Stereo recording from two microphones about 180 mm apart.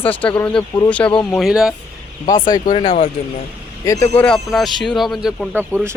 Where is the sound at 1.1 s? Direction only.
20° left (ahead or behind).